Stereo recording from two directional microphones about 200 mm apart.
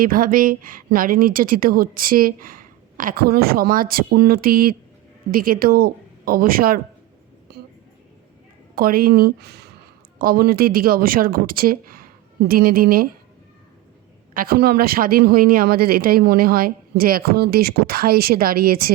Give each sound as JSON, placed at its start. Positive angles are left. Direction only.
{"t": 0.0, "sound": "speech", "side_deg": -45}
{"t": 8.7, "sound": "speech", "side_deg": -45}
{"t": 14.3, "sound": "speech", "side_deg": -50}